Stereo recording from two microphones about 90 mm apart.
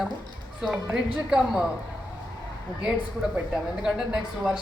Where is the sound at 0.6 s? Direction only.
5° right (ahead or behind).